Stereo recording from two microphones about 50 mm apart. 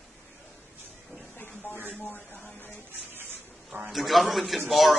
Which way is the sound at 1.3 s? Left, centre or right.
Left.